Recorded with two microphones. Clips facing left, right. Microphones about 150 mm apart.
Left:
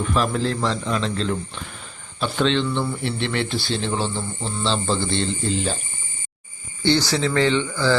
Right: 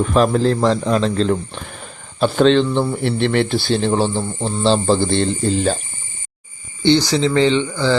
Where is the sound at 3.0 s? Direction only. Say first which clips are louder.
Right 7 dB; 55° right (ahead or behind).